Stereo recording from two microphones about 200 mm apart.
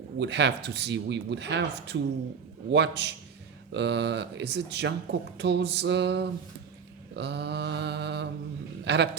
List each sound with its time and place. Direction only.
0.2 s a man's voice: 60° right (ahead or behind)